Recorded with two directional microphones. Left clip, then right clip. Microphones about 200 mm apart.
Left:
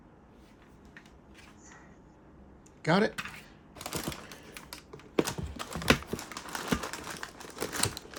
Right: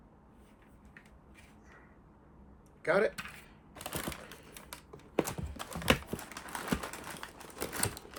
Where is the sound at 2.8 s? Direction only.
40° left (ahead or behind).